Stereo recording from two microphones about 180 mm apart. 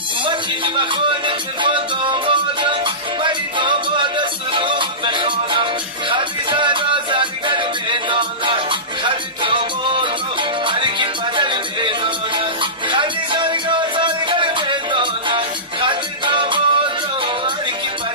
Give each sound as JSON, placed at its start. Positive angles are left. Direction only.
{"t": 0.2, "sound": "music", "side_deg": -25}